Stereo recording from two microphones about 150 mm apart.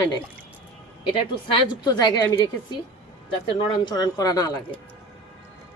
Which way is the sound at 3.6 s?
30° left (ahead or behind).